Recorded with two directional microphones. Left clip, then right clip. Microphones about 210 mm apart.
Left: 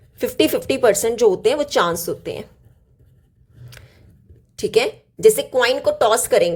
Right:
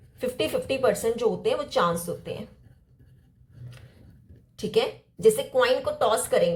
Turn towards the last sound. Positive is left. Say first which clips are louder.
# left 7 dB
turn(degrees=50)  # may be behind; listen again after turning